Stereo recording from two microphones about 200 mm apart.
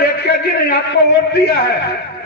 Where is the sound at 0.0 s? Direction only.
55° left (ahead or behind).